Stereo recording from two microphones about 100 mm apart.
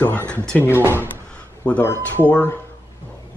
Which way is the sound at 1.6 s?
10° left (ahead or behind).